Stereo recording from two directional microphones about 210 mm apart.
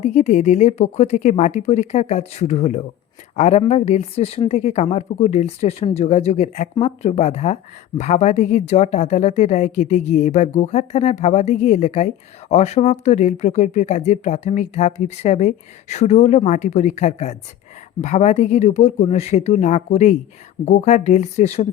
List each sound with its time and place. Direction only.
0.0 s speech: 35° left (ahead or behind)